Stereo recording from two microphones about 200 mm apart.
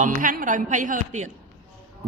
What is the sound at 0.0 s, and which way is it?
A man's voice, 40° right (ahead or behind).